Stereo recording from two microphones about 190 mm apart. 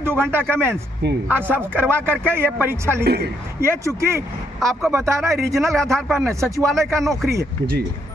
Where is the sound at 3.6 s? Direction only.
15° right (ahead or behind).